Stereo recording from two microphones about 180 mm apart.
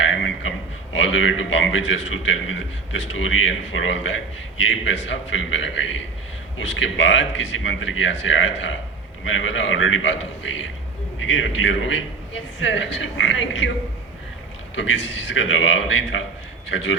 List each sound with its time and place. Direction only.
0.1 s a sound: 90° left
0.9 s a man's voice: 90° left
14.8 s a man's voice: 90° left